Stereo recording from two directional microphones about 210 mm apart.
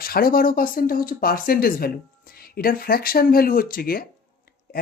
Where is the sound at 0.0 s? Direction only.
45° left (ahead or behind).